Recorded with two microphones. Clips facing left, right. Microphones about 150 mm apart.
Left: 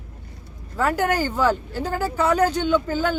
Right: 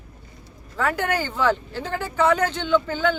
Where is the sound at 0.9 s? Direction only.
40° left (ahead or behind).